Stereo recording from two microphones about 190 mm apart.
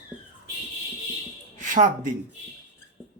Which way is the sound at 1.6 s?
40° right (ahead or behind).